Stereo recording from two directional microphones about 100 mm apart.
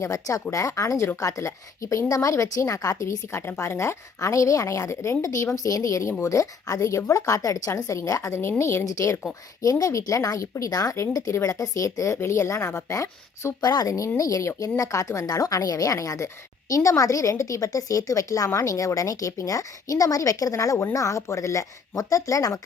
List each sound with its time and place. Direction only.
0.0 s a woman's voice: 35° left (ahead or behind)